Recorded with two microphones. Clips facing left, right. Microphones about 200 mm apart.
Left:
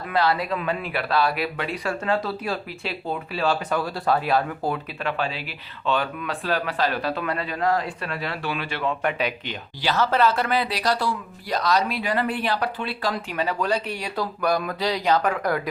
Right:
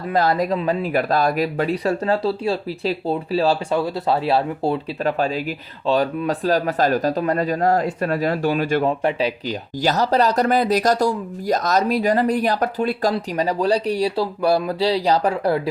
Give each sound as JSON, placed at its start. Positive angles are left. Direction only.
{"t": 0.1, "sound": "speech", "side_deg": -45}
{"t": 5.0, "sound": "speech", "side_deg": -40}